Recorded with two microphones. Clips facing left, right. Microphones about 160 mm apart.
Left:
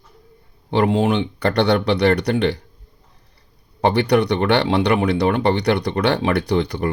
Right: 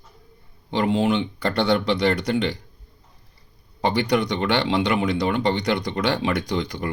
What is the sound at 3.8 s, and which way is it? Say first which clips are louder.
Speech: left 5 dB; 65° left (ahead or behind).